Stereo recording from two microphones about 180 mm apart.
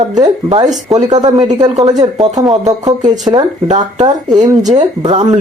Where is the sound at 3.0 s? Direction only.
40° right (ahead or behind).